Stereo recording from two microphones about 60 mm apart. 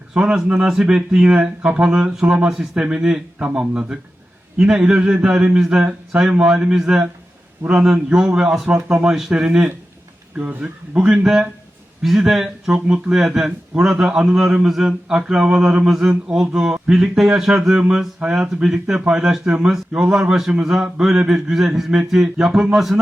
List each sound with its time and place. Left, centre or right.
0.1 s a man's voice: centre
12.0 s a man's voice: centre